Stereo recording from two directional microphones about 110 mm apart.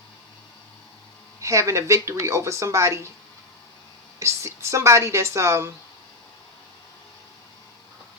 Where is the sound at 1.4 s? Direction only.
25° right (ahead or behind).